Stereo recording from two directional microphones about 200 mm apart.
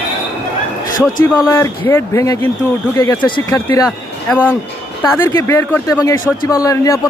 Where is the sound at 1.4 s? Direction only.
15° left (ahead or behind).